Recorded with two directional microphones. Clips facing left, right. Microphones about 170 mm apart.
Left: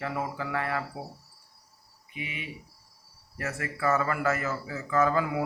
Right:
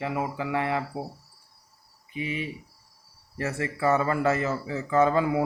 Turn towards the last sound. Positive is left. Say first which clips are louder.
# right 4 dB
turn(degrees=-25)  # may be behind; listen again after turning